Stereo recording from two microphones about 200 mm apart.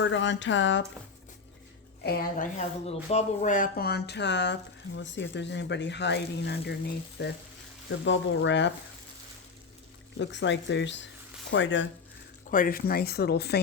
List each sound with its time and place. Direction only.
0.0 s speech: 65° left (ahead or behind)
2.0 s speech: 45° left (ahead or behind)
8.0 s speech: 70° left (ahead or behind)
10.2 s speech: 65° left (ahead or behind)
12.5 s speech: 45° left (ahead or behind)